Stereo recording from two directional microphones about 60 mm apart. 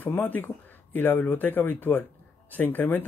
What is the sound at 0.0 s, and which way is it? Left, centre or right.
Speech, left.